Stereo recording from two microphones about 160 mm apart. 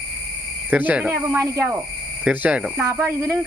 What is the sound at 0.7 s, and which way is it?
Speech, 10° right (ahead or behind).